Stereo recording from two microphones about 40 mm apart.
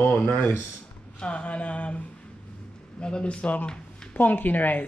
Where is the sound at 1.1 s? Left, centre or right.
Left.